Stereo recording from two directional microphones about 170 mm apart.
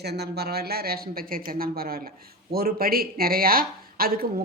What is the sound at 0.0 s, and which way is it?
Speech, 75° right (ahead or behind).